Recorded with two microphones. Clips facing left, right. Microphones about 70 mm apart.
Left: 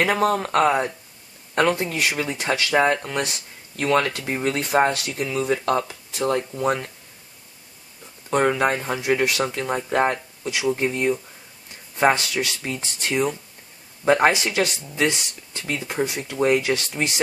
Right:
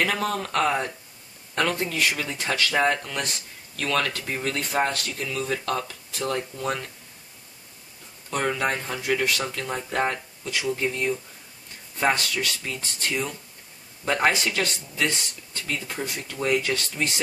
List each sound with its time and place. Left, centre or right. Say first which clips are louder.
0.0 s speech: left 5 dB; left
8.3 s speech: left 6 dB; left